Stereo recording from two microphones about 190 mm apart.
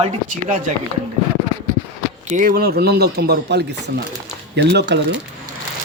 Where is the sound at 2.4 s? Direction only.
50° right (ahead or behind).